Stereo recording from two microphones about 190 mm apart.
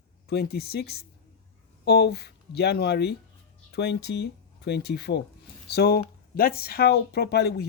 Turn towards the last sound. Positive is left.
turn(degrees=60)  # may be behind; listen again after turning